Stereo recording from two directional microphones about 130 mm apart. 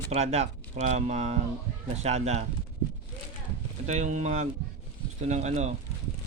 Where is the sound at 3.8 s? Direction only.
65° right (ahead or behind).